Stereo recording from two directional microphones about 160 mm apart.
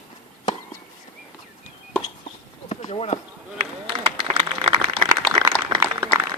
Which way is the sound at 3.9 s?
30° right (ahead or behind).